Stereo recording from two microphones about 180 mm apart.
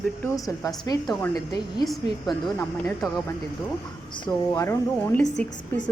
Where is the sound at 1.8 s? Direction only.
Centre (ahead or behind).